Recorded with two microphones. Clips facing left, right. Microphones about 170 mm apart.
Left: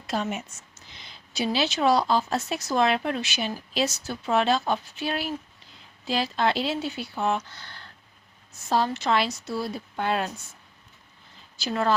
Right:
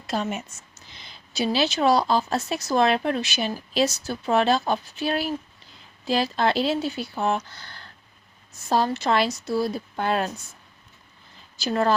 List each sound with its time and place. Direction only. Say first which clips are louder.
0.1 s speech: right 1 dB; 35° right (ahead or behind)
11.5 s a woman's voice: right 3 dB; 40° right (ahead or behind)